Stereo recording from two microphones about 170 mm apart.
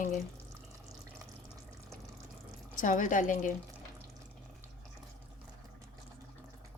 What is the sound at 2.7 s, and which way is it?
Speech, 50° left (ahead or behind).